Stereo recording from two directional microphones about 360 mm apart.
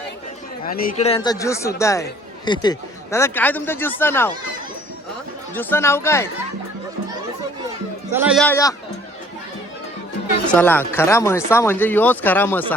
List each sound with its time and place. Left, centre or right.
0.6 s speech: left; by 4.3 s centre
5.5 s speech: centre
8.1 s speech: centre
10.5 s speech: centre